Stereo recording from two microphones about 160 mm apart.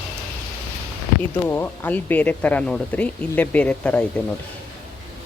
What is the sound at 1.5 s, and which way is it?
Speech, 10° left (ahead or behind).